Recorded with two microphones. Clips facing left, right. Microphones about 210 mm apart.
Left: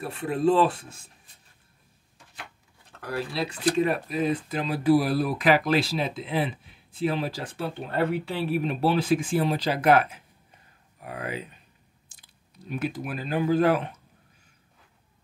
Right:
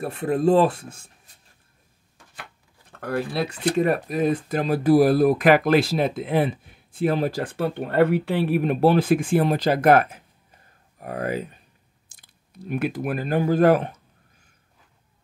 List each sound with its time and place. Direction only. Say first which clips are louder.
0.0 s speech: right 3 dB; 45° right (ahead or behind)
3.0 s speech: right 4 dB; 50° right (ahead or behind)
12.2 s speech: right 9 dB; 60° right (ahead or behind)